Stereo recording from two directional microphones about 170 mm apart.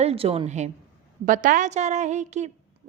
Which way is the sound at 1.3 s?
50° right (ahead or behind).